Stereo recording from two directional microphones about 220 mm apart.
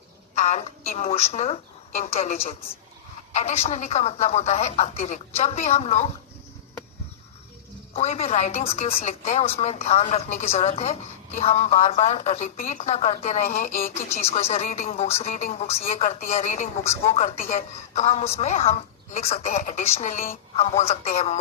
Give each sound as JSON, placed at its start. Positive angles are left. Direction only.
{"t": 0.3, "sound": "a woman's voice", "side_deg": 30}
{"t": 7.9, "sound": "a woman's voice", "side_deg": 30}